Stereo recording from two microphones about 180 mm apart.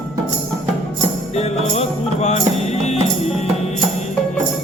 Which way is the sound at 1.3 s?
35° left (ahead or behind).